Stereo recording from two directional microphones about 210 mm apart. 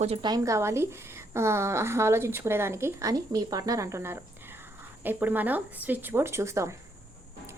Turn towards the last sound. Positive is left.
turn(degrees=-15)  # may be behind; listen again after turning